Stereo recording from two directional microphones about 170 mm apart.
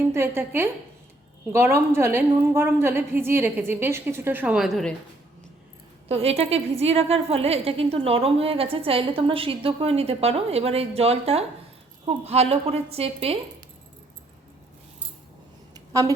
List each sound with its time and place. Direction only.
0.1 s a woman's voice: 15° right (ahead or behind)
6.1 s a woman's voice: 35° right (ahead or behind)
15.7 s a sound: 20° right (ahead or behind)